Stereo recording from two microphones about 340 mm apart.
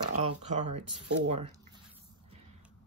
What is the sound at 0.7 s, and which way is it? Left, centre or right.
Speech, right.